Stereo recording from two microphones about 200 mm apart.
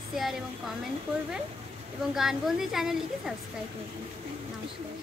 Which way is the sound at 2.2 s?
Centre (ahead or behind).